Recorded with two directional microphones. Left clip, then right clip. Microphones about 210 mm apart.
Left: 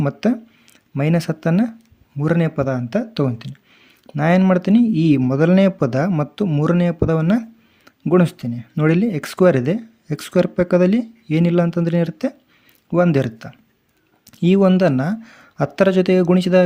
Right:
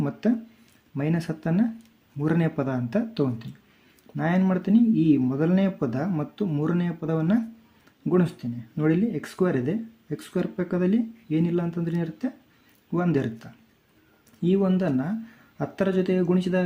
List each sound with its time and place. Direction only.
0.0 s speech: 35° left (ahead or behind)